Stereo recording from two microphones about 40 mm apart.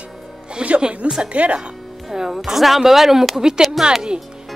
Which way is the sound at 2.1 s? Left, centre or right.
Centre.